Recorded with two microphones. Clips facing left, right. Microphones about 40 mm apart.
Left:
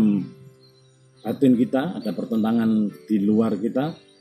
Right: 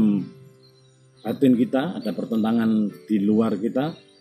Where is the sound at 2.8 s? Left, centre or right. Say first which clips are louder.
Even; centre.